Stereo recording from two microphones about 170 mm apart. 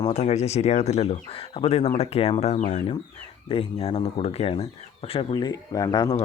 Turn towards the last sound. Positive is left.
turn(degrees=25)  # may be behind; listen again after turning